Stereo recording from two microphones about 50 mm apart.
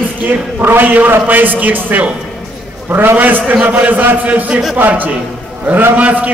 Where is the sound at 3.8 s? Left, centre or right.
Right.